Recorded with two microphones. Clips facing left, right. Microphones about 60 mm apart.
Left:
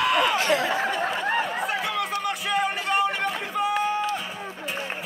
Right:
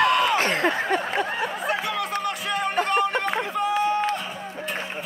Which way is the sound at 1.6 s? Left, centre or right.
Centre.